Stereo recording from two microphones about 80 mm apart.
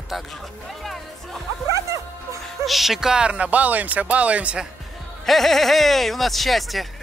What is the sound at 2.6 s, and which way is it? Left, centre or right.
Speech, centre.